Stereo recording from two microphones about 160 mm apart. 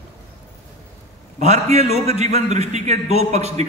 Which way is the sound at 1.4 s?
45° right (ahead or behind).